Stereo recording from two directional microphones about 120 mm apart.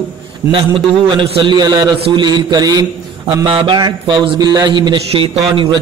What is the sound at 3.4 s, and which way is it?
A man's voice, 45° right (ahead or behind).